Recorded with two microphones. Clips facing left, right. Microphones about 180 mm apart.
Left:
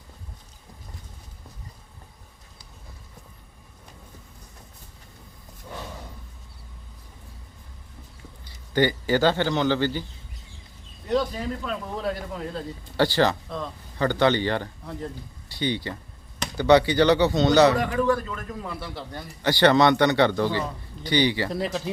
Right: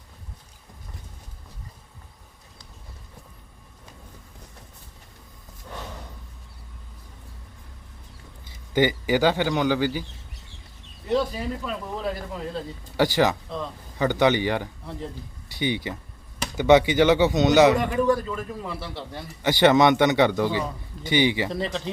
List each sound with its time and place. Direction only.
8.7 s speech: 15° right (ahead or behind)
11.1 s speech: 5° right (ahead or behind)
13.0 s speech: 15° right (ahead or behind)
18.3 s speech: 5° right (ahead or behind)
19.4 s speech: 15° right (ahead or behind)
21.5 s speech: 5° left (ahead or behind)